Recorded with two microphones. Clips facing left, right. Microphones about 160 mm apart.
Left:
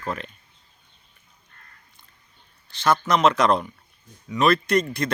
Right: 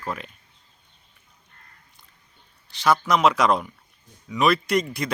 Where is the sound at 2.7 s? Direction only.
15° right (ahead or behind).